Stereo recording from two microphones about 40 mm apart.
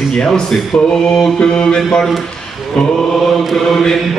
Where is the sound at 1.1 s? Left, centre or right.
Centre.